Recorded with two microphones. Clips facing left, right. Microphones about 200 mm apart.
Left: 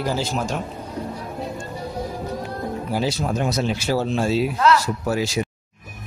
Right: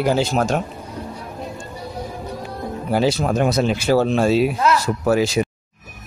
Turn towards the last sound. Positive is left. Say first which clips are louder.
# right 5 dB
turn(degrees=-90)